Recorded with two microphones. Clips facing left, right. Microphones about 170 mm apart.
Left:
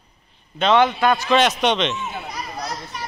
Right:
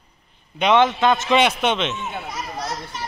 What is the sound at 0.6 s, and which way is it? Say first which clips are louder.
Speech: even; 15° right (ahead or behind).